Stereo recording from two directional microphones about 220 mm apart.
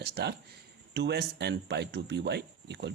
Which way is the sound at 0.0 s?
50° right (ahead or behind).